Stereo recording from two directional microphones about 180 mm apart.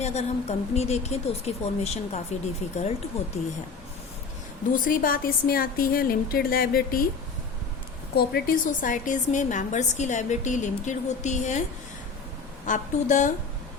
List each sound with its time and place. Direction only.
0.0 s a woman's voice: 40° left (ahead or behind)
4.7 s a woman's voice: 50° left (ahead or behind)
8.1 s a woman's voice: 65° left (ahead or behind); by 11.6 s 40° left (ahead or behind)
12.6 s a woman's voice: 45° left (ahead or behind)